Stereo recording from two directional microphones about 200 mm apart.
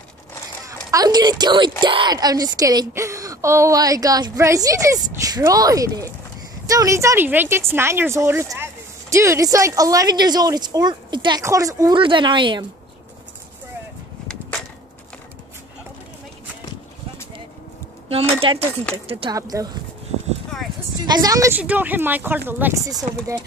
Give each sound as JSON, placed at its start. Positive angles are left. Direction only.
{"t": 0.7, "sound": "a woman's voice", "side_deg": -20}
{"t": 18.0, "sound": "speech", "side_deg": -30}
{"t": 21.0, "sound": "a woman's voice", "side_deg": -20}